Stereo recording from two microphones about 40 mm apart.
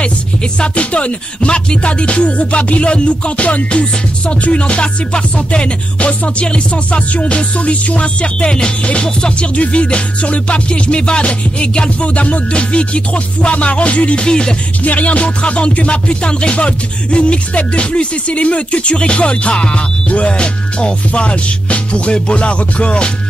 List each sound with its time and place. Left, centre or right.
0.6 s music: left
14.8 s music: left